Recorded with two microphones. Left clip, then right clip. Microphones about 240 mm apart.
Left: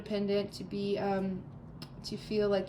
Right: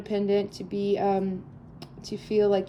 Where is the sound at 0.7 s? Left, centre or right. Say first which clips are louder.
Right 9 dB; left.